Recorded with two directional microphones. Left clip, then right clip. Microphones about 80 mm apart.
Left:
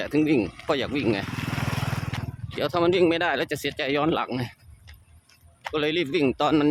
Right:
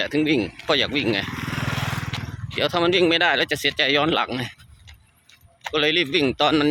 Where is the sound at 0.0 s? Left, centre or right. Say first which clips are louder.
Right 2 dB; left.